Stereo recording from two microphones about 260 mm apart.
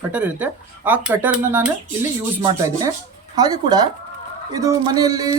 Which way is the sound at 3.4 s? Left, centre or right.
Centre.